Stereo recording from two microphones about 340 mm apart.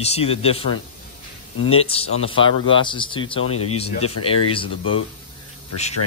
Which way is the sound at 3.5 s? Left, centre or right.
Left.